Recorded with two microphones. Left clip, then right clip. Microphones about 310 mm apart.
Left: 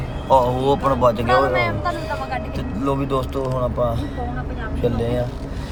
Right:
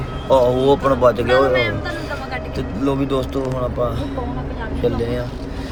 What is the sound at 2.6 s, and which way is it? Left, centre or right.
Speech, centre.